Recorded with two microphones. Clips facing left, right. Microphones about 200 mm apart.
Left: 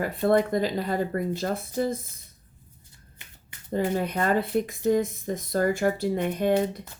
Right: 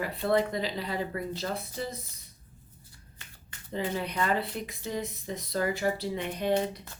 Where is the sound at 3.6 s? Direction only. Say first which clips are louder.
Left 6 dB; 45° left (ahead or behind).